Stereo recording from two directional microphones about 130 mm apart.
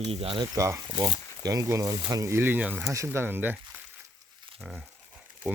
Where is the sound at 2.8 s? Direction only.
25° right (ahead or behind).